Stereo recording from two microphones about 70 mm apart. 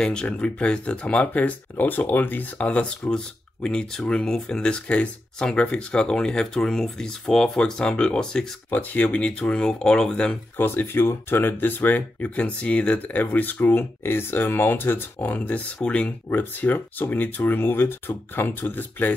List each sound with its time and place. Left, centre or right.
0.0 s speech: centre
8.6 s speech: left
10.6 s speech: left